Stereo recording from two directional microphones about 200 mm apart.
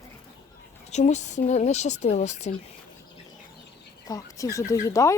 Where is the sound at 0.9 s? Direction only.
35° left (ahead or behind).